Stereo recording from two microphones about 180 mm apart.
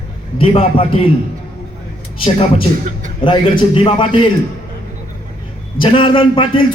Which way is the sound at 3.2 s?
30° left (ahead or behind).